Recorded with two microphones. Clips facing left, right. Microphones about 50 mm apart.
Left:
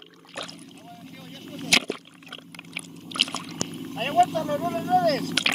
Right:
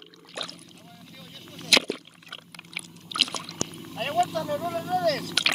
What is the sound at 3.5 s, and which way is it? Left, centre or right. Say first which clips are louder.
Liquid: left 2 dB; left.